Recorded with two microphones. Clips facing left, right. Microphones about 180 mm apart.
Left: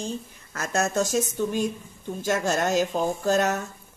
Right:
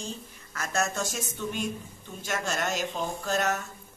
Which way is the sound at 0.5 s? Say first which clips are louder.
Left 5 dB; 45° left (ahead or behind).